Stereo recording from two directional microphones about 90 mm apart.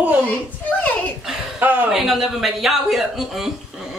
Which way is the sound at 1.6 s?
20° right (ahead or behind).